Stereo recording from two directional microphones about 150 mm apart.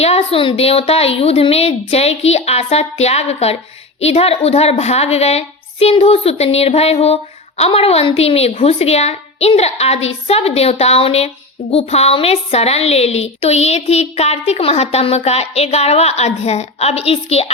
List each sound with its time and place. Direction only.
0.0 s a woman's voice: 45° left (ahead or behind)